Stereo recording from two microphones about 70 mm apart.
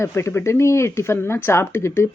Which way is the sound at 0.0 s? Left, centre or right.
Left.